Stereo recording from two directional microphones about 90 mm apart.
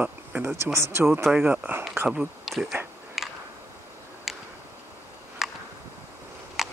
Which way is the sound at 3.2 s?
5° right (ahead or behind).